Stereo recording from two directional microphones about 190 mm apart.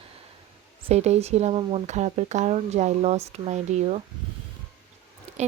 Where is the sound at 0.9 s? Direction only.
35° right (ahead or behind).